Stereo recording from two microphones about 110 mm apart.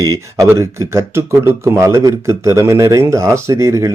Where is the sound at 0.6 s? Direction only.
25° right (ahead or behind).